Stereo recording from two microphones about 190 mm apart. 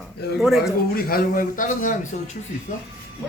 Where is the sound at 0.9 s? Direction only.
50° left (ahead or behind).